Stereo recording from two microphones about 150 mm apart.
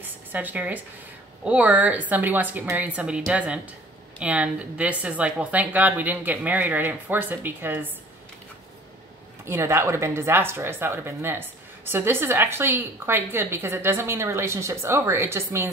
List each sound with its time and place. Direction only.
0.0 s speech: 10° right (ahead or behind)
9.4 s speech: 15° right (ahead or behind)